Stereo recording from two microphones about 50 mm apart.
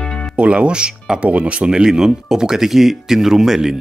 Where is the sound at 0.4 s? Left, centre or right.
Right.